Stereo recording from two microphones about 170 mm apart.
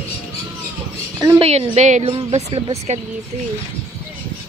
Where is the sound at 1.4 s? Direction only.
35° right (ahead or behind).